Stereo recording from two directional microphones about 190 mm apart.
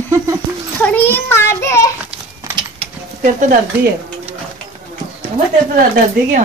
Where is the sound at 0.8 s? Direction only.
10° left (ahead or behind).